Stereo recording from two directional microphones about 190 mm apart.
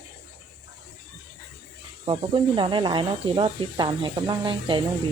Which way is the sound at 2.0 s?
25° right (ahead or behind).